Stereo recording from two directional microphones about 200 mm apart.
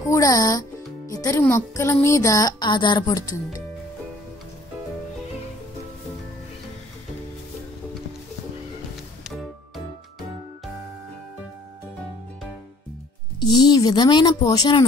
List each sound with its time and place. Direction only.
0.0 s speech: 15° left (ahead or behind)
9.2 s music: centre (ahead or behind)
13.4 s a woman's voice: 20° left (ahead or behind)